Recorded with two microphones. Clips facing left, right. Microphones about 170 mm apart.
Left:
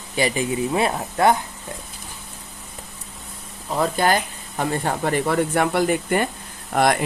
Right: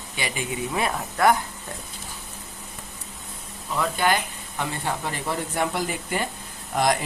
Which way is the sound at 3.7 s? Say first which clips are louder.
Left 4 dB; 40° left (ahead or behind).